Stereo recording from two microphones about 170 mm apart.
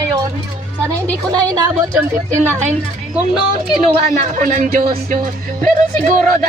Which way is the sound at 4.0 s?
50° right (ahead or behind).